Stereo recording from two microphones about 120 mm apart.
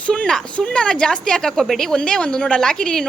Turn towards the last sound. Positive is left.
turn(degrees=5)  # may be behind; listen again after turning